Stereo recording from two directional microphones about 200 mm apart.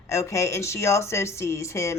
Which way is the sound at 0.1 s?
15° left (ahead or behind).